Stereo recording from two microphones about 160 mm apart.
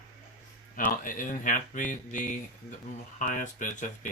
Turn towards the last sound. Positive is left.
turn(degrees=55)  # may be behind; listen again after turning